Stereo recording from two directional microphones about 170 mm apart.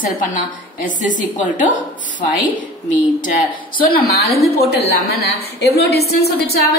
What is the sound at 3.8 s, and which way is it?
A woman's voice, 60° left (ahead or behind).